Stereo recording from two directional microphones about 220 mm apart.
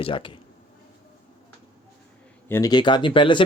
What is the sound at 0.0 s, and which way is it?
Speech, 25° left (ahead or behind).